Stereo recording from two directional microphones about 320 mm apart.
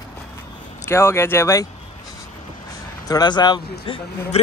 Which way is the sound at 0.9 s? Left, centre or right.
Centre.